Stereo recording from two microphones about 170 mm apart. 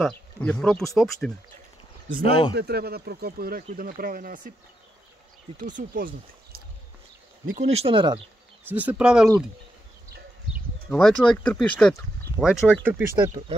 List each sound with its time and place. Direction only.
0.0 s speech: 5° left (ahead or behind)
2.0 s speech: 55° right (ahead or behind)
2.5 s speech: 70° right (ahead or behind); by 4.4 s 55° right (ahead or behind)
5.8 s speech: 55° right (ahead or behind)
7.5 s speech: 40° right (ahead or behind)
8.6 s speech: 10° right (ahead or behind)
10.9 s speech: centre (ahead or behind)